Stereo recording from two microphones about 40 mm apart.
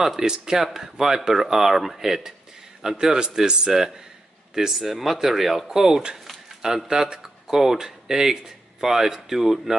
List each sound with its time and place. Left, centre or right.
0.0 s speech: centre